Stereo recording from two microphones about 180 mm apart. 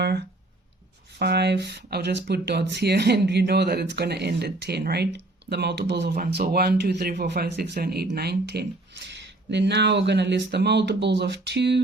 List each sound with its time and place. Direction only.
1.2 s speech: 65° right (ahead or behind)